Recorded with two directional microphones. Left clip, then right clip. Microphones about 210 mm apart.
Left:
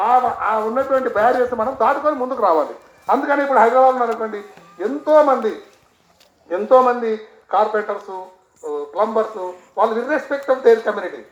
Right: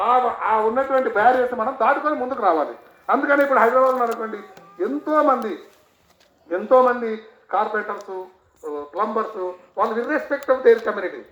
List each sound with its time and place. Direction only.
0.0 s speech: 40° left (ahead or behind)
6.5 s speech: 45° left (ahead or behind)